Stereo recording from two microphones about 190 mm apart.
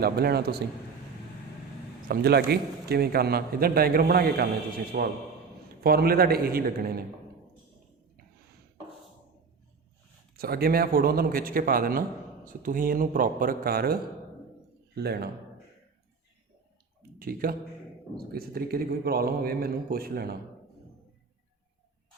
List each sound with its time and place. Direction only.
0.0 s a man's voice: 55° right (ahead or behind)
2.0 s a man's voice: 55° right (ahead or behind)
10.3 s a man's voice: 50° right (ahead or behind)
17.2 s a man's voice: 50° right (ahead or behind)